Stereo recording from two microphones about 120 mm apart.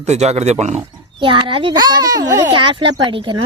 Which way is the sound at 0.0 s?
65° right (ahead or behind).